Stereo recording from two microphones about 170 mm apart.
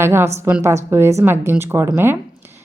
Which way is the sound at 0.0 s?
15° right (ahead or behind).